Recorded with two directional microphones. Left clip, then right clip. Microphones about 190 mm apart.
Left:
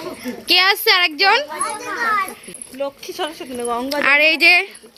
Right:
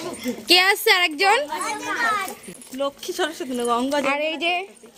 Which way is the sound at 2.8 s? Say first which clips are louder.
Even; 80° right.